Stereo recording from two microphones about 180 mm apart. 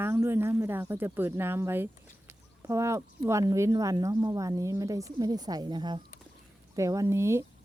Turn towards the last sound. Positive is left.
turn(degrees=-15)  # may be behind; listen again after turning